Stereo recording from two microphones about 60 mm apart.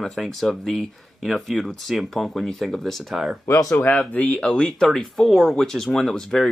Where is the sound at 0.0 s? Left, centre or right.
Centre.